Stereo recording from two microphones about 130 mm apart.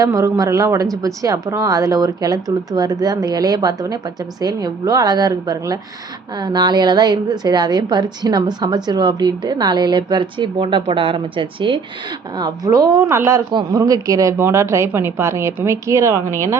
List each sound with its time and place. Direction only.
0.0 s a woman's voice: 25° right (ahead or behind)
12.4 s a woman's voice: 25° right (ahead or behind)
13.5 s a woman's voice: 35° right (ahead or behind)